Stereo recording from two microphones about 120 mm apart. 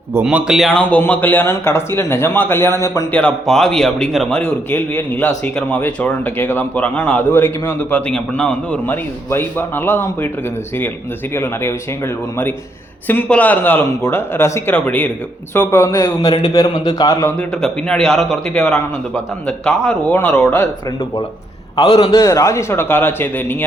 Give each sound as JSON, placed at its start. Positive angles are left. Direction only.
{"t": 0.3, "sound": "a man's voice", "side_deg": -5}
{"t": 0.7, "sound": "speech", "side_deg": 10}
{"t": 3.1, "sound": "a man's voice", "side_deg": 10}
{"t": 11.3, "sound": "speech", "side_deg": 20}
{"t": 17.3, "sound": "a man's voice", "side_deg": 5}
{"t": 21.8, "sound": "a man's voice", "side_deg": 55}
{"t": 22.1, "sound": "speech", "side_deg": 30}